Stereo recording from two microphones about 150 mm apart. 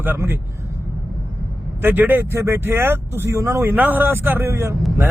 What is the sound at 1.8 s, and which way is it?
Speech, 15° right (ahead or behind).